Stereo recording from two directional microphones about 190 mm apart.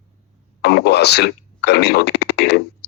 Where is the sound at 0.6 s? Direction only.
60° left (ahead or behind).